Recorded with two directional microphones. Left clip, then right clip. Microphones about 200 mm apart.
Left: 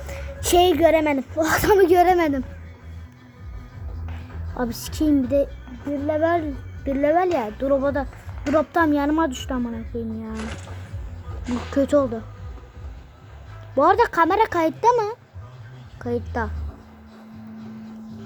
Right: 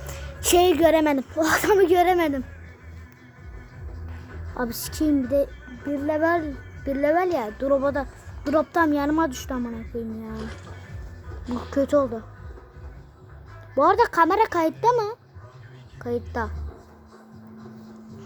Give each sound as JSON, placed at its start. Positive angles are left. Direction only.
{"t": 0.1, "sound": "a woman's voice", "side_deg": -5}
{"t": 1.5, "sound": "speech", "side_deg": 0}
{"t": 4.5, "sound": "a woman's voice", "side_deg": -5}
{"t": 10.3, "sound": "speech", "side_deg": 20}
{"t": 11.7, "sound": "speech", "side_deg": 0}
{"t": 13.7, "sound": "speech", "side_deg": 0}